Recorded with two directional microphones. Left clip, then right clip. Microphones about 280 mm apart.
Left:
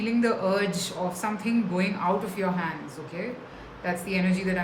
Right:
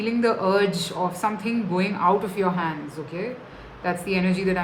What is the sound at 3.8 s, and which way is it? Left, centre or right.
Speech, centre.